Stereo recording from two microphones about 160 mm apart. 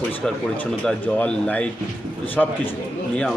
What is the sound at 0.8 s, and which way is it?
A man's voice, 5° left (ahead or behind).